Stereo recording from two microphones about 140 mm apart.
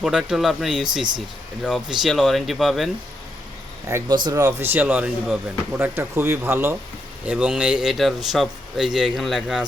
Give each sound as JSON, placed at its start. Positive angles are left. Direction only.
{"t": 0.0, "sound": "speech", "side_deg": 0}
{"t": 4.1, "sound": "speech", "side_deg": -25}